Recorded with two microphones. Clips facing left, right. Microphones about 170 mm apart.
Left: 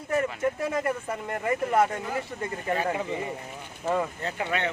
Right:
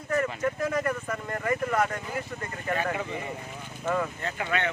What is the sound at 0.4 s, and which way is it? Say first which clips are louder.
Speech: left 1 dB; 25° left (ahead or behind).